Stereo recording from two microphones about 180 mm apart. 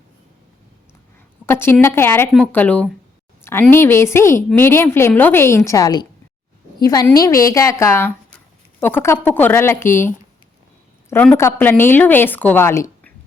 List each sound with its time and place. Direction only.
1.5 s a woman's voice: 10° left (ahead or behind)